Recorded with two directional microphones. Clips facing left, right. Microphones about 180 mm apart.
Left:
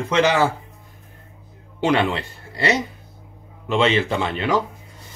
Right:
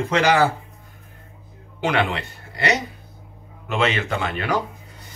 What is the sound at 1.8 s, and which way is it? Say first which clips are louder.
A man's voice: left 3 dB; 30° left (ahead or behind).